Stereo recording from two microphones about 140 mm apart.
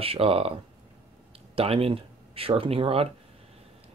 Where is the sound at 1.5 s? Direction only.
45° right (ahead or behind).